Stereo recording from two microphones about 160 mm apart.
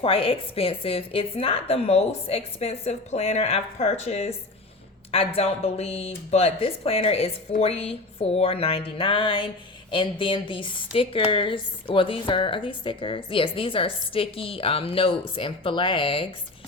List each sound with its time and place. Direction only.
0.0 s a woman's voice: 35° left (ahead or behind)